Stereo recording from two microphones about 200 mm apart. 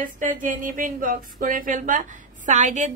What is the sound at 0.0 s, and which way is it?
Speech, 40° right (ahead or behind).